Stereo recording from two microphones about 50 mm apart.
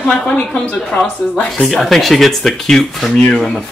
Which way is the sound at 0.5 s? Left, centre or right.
Left.